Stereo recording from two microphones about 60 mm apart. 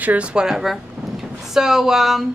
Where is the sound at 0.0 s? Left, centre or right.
Right.